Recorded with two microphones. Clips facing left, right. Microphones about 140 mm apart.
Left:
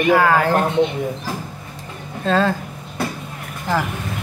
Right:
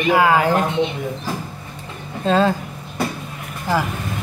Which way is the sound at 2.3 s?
20° right (ahead or behind).